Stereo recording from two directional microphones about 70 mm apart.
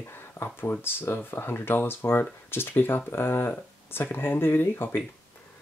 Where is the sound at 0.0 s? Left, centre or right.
Left.